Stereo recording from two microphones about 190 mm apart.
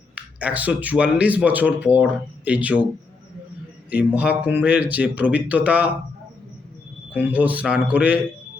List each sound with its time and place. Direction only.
0.2 s speech: 5° right (ahead or behind)
3.8 s speech: 5° right (ahead or behind)
7.1 s speech: 10° right (ahead or behind)